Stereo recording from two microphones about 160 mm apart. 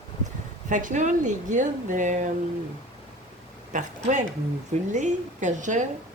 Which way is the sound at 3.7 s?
50° right (ahead or behind).